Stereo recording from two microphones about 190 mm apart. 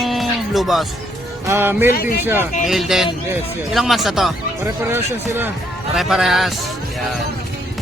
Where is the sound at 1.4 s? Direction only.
10° right (ahead or behind).